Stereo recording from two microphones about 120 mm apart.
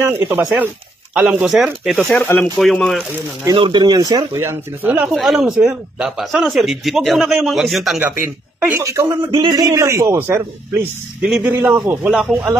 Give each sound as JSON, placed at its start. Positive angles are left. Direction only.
{"t": 0.0, "sound": "a woman's voice", "side_deg": -20}
{"t": 1.4, "sound": "speech", "side_deg": -5}
{"t": 2.0, "sound": "speech", "side_deg": 15}
{"t": 2.6, "sound": "speech", "side_deg": 5}
{"t": 3.5, "sound": "a man's voice", "side_deg": -40}
{"t": 4.4, "sound": "speech", "side_deg": -20}
{"t": 5.0, "sound": "speech", "side_deg": 0}
{"t": 8.0, "sound": "a woman's voice", "side_deg": -15}
{"t": 8.8, "sound": "a man's voice", "side_deg": -25}